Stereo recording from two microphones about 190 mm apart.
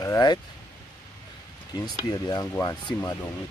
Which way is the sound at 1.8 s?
20° left (ahead or behind).